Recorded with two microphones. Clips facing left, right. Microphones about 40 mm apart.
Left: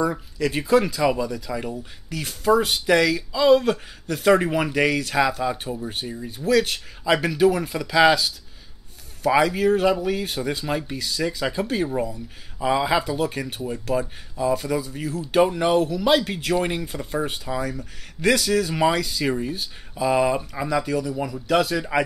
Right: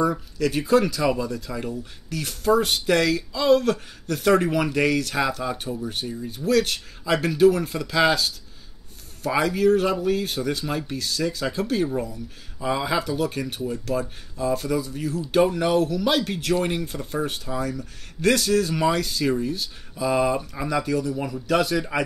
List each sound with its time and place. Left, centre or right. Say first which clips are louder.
0.1 s speech: right 1 dB; centre
18.8 s speech: left 1 dB; left
21.2 s speech: left 1 dB; centre
21.5 s speech: left 2 dB; centre